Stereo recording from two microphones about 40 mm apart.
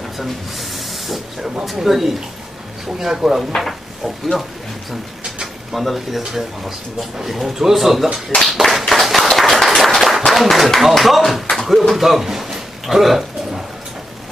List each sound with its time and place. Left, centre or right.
0.2 s speech: centre
8.6 s clapping: centre
9.4 s a sound: centre
10.8 s speech: centre
11.5 s a sound: centre
11.9 s speech: centre